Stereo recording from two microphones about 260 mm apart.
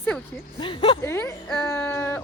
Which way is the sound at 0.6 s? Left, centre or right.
Centre.